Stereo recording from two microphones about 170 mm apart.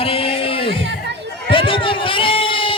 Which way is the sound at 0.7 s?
90° right.